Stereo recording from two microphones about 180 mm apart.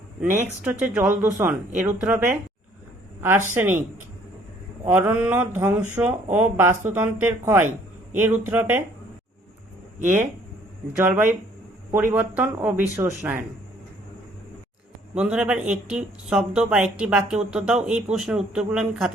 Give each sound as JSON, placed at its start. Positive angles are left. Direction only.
{"t": 0.2, "sound": "speech", "side_deg": -10}
{"t": 4.9, "sound": "speech", "side_deg": -10}
{"t": 10.9, "sound": "speech", "side_deg": -10}
{"t": 15.1, "sound": "speech", "side_deg": -5}